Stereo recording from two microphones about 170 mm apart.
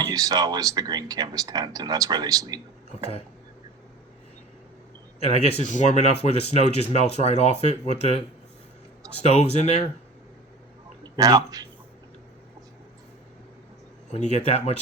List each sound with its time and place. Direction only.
0.1 s speech: 20° right (ahead or behind)
2.9 s speech: 40° left (ahead or behind)
5.2 s speech: 40° left (ahead or behind)
9.2 s speech: 40° left (ahead or behind)
11.0 s a man's voice: 20° right (ahead or behind)
14.1 s speech: 40° left (ahead or behind)